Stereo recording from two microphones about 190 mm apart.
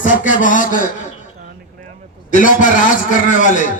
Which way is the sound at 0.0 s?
45° left (ahead or behind).